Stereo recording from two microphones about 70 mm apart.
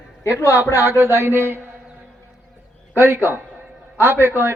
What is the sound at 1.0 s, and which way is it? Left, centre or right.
Speech, right.